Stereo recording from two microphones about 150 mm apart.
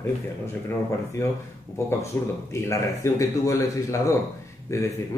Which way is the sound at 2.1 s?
15° left (ahead or behind).